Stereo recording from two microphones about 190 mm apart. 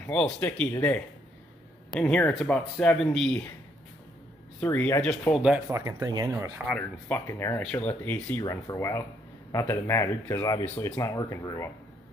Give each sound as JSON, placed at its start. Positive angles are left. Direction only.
{"t": 0.0, "sound": "speech", "side_deg": 10}
{"t": 4.6, "sound": "speech", "side_deg": 10}
{"t": 5.3, "sound": "speech", "side_deg": 0}
{"t": 5.7, "sound": "speech", "side_deg": -15}
{"t": 6.7, "sound": "speech", "side_deg": 10}